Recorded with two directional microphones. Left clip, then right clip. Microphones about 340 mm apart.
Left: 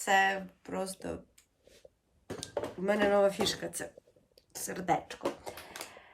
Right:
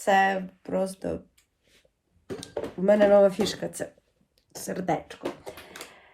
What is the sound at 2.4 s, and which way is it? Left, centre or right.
Speech, centre.